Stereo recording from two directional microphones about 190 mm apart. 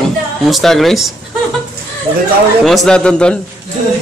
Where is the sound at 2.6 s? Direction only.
Centre (ahead or behind).